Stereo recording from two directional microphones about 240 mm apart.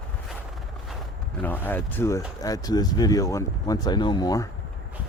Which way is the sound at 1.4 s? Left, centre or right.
Centre.